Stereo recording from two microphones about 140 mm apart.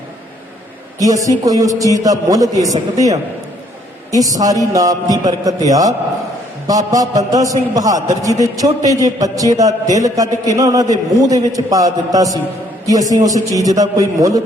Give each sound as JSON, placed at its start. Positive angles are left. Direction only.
{"t": 0.9, "sound": "a man's voice", "side_deg": -25}
{"t": 4.1, "sound": "a man's voice", "side_deg": -25}